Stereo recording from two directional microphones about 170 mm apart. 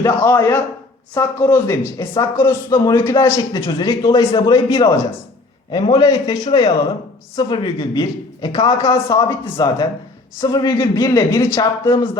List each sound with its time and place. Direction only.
0.0 s a man's voice: 15° left (ahead or behind)
4.3 s speech: 35° left (ahead or behind)
4.5 s a man's voice: 20° left (ahead or behind)